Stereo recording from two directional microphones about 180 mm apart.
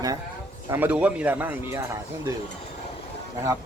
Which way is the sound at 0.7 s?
10° right (ahead or behind).